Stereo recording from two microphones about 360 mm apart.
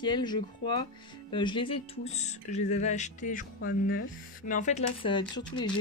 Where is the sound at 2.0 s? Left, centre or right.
Centre.